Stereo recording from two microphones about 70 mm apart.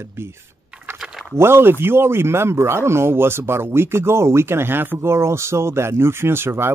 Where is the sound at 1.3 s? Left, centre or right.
Right.